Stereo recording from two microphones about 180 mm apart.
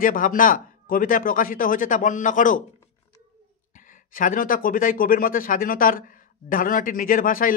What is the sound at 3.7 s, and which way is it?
Speech, 45° left (ahead or behind).